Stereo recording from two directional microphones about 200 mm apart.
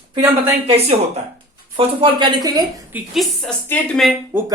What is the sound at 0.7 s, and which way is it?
Speech, 30° right (ahead or behind).